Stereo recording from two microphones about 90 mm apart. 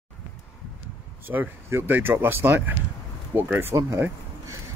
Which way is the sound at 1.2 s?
20° right (ahead or behind).